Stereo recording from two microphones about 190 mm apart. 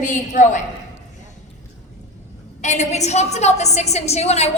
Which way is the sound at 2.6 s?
40° left (ahead or behind).